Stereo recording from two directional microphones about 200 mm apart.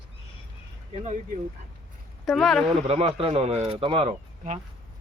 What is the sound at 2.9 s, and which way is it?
Speech, 30° right (ahead or behind).